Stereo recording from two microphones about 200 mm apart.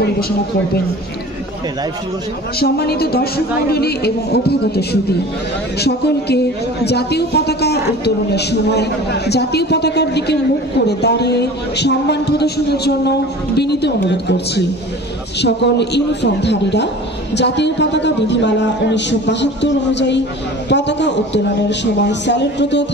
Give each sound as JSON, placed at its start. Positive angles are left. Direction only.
{"t": 2.6, "sound": "a woman's voice", "side_deg": 50}